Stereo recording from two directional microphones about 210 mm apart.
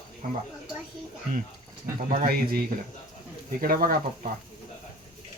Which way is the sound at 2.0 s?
40° right (ahead or behind).